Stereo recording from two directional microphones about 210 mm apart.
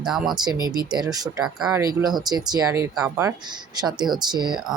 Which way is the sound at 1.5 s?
5° right (ahead or behind).